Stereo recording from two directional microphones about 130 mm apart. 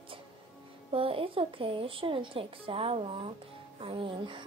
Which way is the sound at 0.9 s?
45° right (ahead or behind).